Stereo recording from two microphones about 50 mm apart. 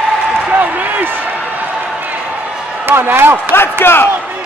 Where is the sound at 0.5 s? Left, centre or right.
Right.